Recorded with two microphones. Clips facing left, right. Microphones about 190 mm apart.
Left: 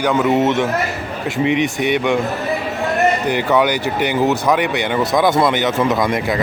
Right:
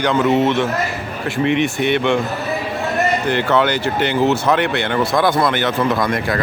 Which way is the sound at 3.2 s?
15° left (ahead or behind).